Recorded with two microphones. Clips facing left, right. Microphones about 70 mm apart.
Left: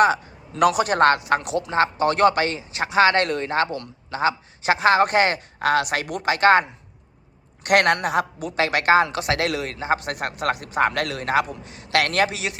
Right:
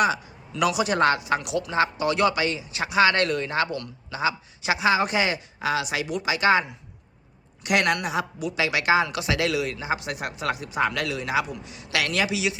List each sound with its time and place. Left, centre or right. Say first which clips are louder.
0.0 s a woman's voice: left 5 dB; left